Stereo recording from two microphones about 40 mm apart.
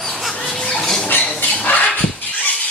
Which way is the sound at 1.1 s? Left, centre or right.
Left.